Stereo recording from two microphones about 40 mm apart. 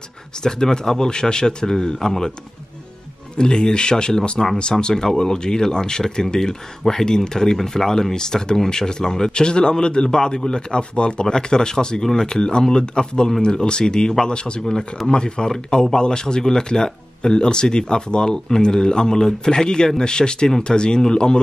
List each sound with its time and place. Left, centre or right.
0.4 s speech: centre
3.3 s speech: centre
14.6 s speech: centre